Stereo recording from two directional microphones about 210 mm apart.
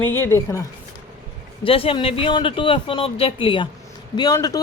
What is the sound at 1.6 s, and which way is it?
Speech, 25° left (ahead or behind).